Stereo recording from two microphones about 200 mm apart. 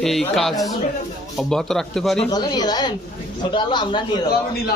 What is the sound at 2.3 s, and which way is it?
Speech, 20° left (ahead or behind).